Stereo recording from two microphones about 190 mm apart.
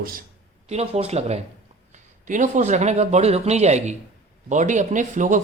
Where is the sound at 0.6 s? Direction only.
35° right (ahead or behind).